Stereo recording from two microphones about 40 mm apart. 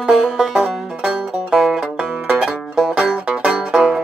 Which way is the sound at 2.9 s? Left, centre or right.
Right.